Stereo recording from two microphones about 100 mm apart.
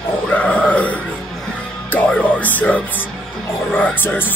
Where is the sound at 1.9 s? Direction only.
15° left (ahead or behind).